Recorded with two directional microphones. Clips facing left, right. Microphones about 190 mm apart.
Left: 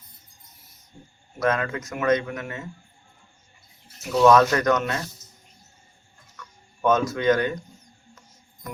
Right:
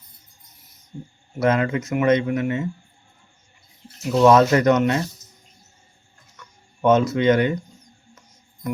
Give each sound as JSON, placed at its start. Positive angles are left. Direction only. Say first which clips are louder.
{"t": 1.4, "sound": "speech", "louder": "right 4 dB", "side_deg": -25}
{"t": 4.1, "sound": "speech", "louder": "right 2 dB", "side_deg": -25}
{"t": 6.8, "sound": "speech", "louder": "right 4 dB", "side_deg": -25}